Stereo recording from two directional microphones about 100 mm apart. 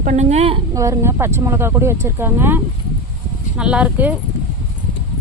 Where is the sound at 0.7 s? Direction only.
30° right (ahead or behind).